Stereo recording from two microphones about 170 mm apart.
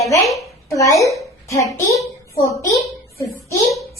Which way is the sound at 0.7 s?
20° left (ahead or behind).